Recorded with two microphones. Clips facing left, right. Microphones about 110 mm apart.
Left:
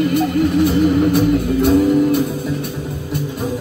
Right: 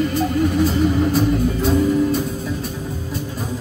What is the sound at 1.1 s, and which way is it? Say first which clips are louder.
Music: left 3 dB; 60° left (ahead or behind).